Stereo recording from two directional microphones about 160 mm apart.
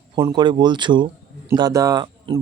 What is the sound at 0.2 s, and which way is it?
Speech, 25° right (ahead or behind).